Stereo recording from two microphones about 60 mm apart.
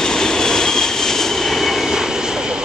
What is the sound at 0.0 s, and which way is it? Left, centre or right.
Vehicle, centre.